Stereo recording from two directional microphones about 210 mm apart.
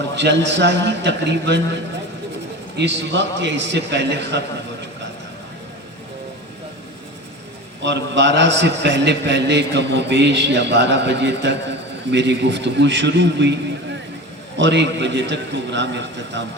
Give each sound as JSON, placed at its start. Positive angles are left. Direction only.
{"t": 0.2, "sound": "a man's voice", "side_deg": -55}
{"t": 2.7, "sound": "a man's voice", "side_deg": -55}
{"t": 7.8, "sound": "a man's voice", "side_deg": -55}
{"t": 14.6, "sound": "a man's voice", "side_deg": -55}